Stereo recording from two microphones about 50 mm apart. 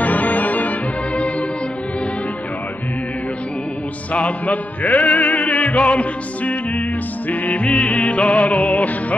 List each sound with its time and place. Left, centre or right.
0.0 s music: left
4.1 s music: left